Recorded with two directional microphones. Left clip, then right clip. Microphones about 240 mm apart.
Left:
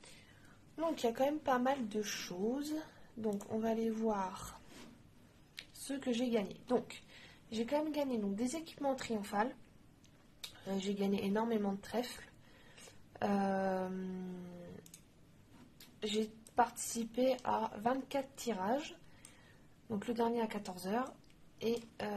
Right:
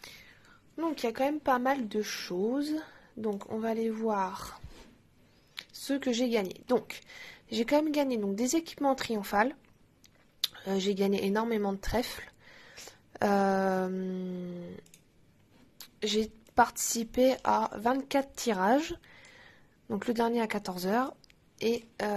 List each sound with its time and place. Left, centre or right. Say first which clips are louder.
0.7 s a woman's voice: right 4 dB; right
16.5 s speech: right 8 dB; right
19.9 s speech: right 7 dB; right